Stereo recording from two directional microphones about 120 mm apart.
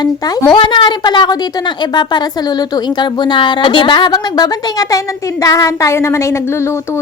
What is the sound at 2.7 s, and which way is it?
A woman's voice, 40° left (ahead or behind).